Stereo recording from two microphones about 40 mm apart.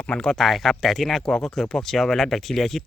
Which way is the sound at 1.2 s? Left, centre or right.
Centre.